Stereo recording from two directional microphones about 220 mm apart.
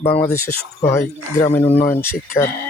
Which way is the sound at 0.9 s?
10° left (ahead or behind).